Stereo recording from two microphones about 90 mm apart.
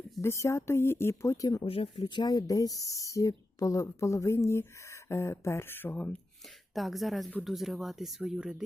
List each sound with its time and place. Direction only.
0.2 s speech: 30° left (ahead or behind)
1.6 s speech: 90° left; by 6.1 s 20° left (ahead or behind)
6.7 s speech: centre (ahead or behind)